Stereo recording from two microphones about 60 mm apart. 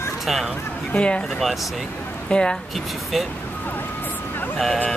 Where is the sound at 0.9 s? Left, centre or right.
Centre.